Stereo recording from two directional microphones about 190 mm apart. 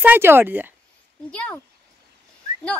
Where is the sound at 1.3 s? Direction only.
5° left (ahead or behind).